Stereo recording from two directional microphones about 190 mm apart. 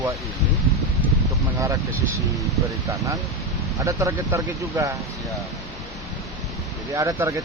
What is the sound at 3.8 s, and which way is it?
Speech, 15° right (ahead or behind).